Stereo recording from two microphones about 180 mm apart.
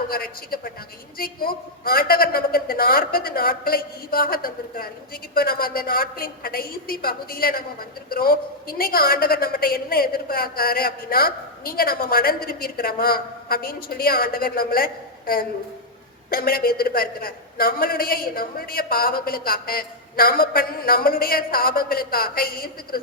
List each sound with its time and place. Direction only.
0.1 s a woman's voice: 55° left (ahead or behind)
16.3 s a woman's voice: 55° left (ahead or behind)